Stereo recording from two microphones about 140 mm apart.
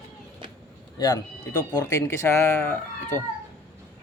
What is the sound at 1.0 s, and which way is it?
Speech, 25° left (ahead or behind).